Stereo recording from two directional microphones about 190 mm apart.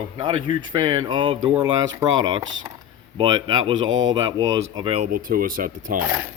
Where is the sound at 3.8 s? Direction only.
90° right.